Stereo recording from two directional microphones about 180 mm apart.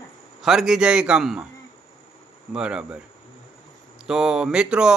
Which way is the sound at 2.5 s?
5° right (ahead or behind).